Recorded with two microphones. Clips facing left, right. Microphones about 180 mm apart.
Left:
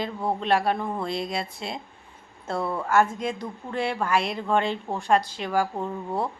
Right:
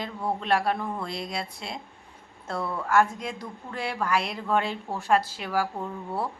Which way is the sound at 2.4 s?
25° left (ahead or behind).